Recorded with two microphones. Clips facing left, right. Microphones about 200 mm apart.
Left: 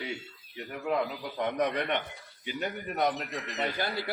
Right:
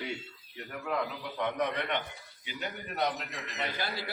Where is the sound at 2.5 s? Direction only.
45° left (ahead or behind).